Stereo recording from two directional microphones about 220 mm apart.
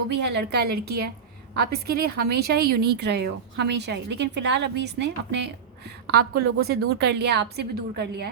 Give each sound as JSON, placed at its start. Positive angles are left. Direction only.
{"t": 0.1, "sound": "speech", "side_deg": -50}